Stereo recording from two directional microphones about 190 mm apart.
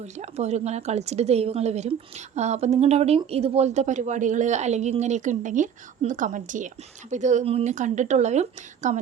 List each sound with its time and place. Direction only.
0.0 s speech: 35° right (ahead or behind)